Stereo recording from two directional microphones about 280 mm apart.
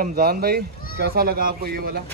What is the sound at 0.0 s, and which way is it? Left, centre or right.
Speech, right.